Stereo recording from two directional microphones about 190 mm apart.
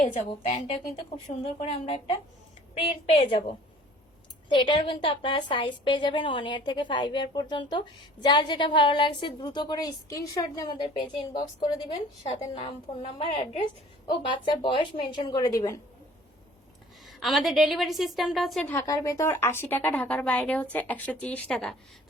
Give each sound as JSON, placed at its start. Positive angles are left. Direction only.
{"t": 0.0, "sound": "a woman's voice", "side_deg": 40}
{"t": 17.1, "sound": "a woman's voice", "side_deg": 0}